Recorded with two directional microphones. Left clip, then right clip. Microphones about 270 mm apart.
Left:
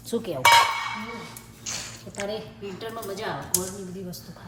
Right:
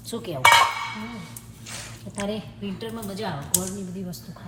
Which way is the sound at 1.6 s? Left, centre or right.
Centre.